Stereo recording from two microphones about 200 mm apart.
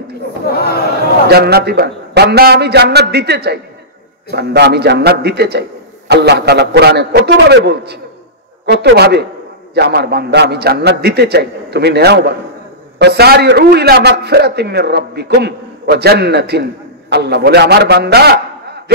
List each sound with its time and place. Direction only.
0.5 s speech: 50° left (ahead or behind)
1.2 s a man's voice: 50° right (ahead or behind)